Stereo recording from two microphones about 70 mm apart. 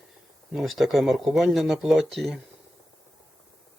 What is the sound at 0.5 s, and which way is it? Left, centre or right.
Speech, centre.